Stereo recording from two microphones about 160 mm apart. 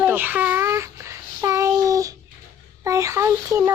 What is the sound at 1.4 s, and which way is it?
Child singing, 20° right (ahead or behind).